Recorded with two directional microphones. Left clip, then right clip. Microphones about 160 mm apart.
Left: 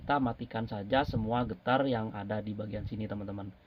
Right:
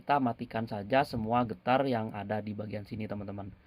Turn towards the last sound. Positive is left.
turn(degrees=-40)  # may be behind; listen again after turning